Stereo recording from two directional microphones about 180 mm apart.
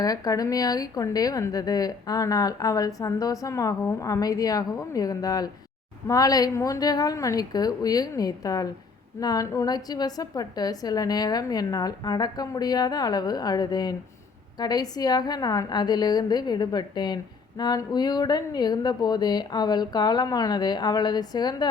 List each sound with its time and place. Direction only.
0.0 s a woman's voice: 20° left (ahead or behind)